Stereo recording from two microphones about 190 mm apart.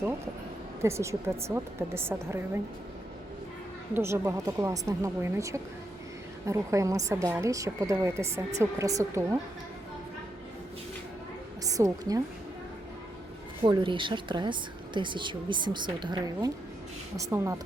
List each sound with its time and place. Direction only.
0.8 s speech: 15° right (ahead or behind)
3.9 s speech: 10° right (ahead or behind)
11.6 s a woman's voice: 20° right (ahead or behind)
13.7 s speech: 25° right (ahead or behind)